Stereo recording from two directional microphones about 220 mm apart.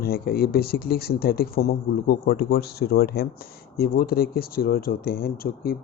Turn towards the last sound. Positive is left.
turn(degrees=45)  # may be behind; listen again after turning